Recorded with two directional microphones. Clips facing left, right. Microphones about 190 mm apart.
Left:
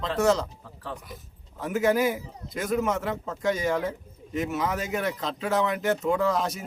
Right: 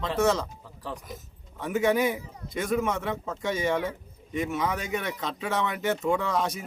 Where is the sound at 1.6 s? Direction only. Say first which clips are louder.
Left 1 dB; centre (ahead or behind).